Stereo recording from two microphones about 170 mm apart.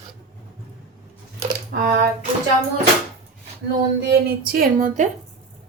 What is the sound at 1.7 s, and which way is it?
Speech, 65° right (ahead or behind).